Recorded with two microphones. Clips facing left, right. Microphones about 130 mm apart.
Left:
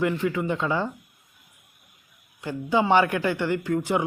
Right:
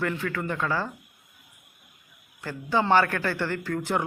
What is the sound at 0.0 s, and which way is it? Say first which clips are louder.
Speech: left 4 dB; 15° left (ahead or behind).